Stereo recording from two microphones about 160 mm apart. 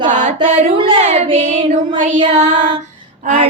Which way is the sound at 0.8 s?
30° right (ahead or behind).